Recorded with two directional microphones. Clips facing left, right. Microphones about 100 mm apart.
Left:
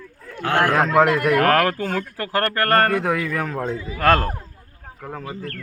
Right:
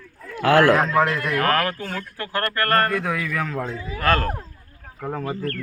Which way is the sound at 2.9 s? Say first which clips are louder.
Left 3 dB; 45° left (ahead or behind).